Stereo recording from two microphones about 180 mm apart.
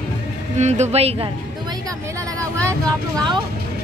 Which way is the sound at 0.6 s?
40° right (ahead or behind).